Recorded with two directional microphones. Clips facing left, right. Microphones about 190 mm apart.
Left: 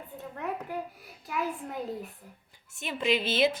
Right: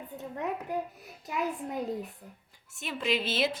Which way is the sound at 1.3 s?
20° right (ahead or behind).